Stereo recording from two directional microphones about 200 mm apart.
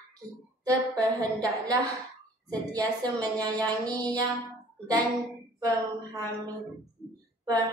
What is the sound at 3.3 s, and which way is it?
Speech, 20° right (ahead or behind).